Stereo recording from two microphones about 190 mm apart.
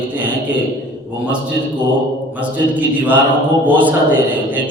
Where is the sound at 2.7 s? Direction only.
10° right (ahead or behind).